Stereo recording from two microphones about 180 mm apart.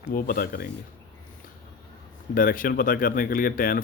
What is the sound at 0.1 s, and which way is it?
Speech, 55° left (ahead or behind).